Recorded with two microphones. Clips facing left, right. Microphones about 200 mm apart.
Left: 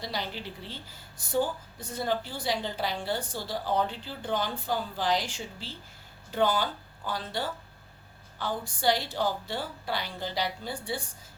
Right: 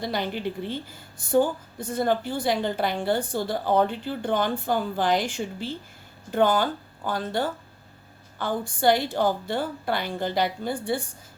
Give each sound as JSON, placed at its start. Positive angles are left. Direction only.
{"t": 0.0, "sound": "a woman's voice", "side_deg": -55}